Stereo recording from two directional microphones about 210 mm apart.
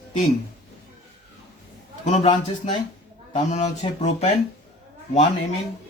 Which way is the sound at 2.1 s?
25° left (ahead or behind).